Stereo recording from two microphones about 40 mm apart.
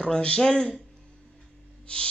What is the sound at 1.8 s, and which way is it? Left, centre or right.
Owl, left.